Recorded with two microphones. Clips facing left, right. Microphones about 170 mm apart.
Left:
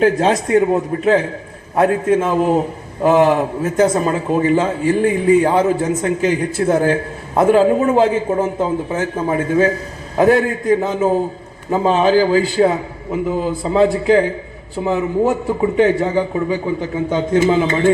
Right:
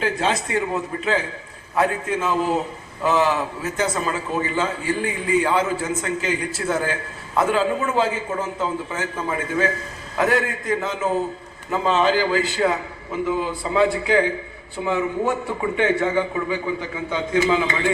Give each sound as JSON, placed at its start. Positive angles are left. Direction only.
{"t": 0.0, "sound": "a man's voice", "side_deg": 45}
{"t": 7.5, "sound": "a man's voice", "side_deg": 45}